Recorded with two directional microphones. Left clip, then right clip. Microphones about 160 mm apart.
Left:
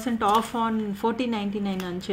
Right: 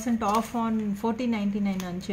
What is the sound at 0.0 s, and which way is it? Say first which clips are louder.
Speech: left 4 dB; 25° left (ahead or behind).